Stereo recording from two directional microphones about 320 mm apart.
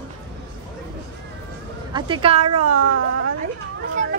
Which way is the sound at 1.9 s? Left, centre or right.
Centre.